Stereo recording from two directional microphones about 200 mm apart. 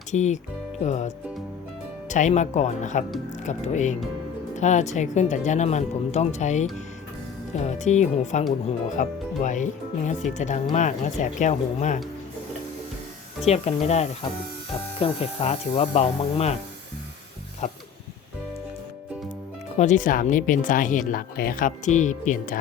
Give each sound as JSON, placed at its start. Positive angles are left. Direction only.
{"t": 0.1, "sound": "speech", "side_deg": 35}
{"t": 13.4, "sound": "speech", "side_deg": 30}
{"t": 17.6, "sound": "speech", "side_deg": 35}
{"t": 19.7, "sound": "speech", "side_deg": 35}